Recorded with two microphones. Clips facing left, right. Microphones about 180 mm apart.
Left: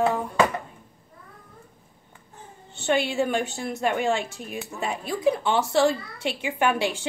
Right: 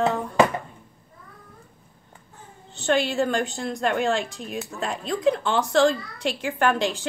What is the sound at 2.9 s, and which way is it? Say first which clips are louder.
A woman's voice: right 1 dB; 10° left (ahead or behind).